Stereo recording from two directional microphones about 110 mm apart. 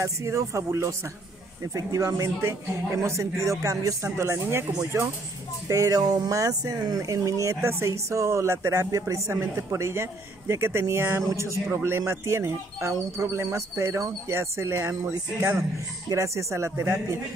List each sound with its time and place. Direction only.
0.0 s speech: 25° right (ahead or behind)
5.7 s speech: 30° right (ahead or behind)